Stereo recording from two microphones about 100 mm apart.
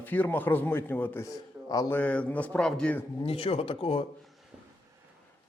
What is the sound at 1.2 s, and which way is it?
Speech, 35° left (ahead or behind).